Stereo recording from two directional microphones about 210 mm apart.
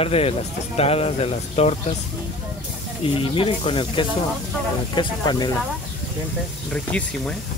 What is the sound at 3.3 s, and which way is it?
Speech, 25° left (ahead or behind).